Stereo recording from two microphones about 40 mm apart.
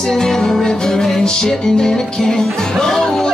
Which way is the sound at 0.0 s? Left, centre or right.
Centre.